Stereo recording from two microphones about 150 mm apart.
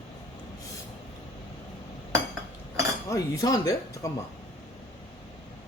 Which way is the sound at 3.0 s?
20° left (ahead or behind).